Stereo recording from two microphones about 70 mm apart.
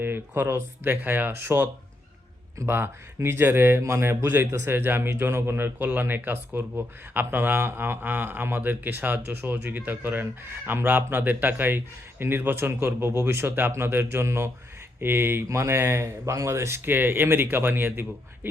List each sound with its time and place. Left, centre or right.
0.0 s speech: right
15.4 s speech: right